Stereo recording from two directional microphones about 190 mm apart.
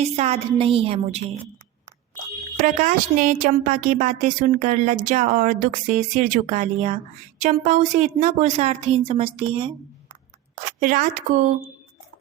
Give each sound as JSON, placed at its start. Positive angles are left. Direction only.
{"t": 0.0, "sound": "a woman's voice", "side_deg": -35}
{"t": 2.6, "sound": "a woman's voice", "side_deg": -45}
{"t": 10.8, "sound": "a woman's voice", "side_deg": -45}